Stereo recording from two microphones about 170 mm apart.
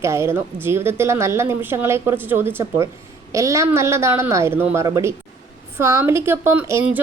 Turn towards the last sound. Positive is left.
turn(degrees=-10)  # may be behind; listen again after turning